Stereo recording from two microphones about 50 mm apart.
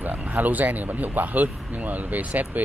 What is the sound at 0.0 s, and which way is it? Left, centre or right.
Speech, right.